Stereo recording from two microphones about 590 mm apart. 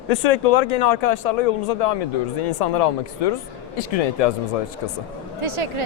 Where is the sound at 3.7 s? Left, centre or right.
Left.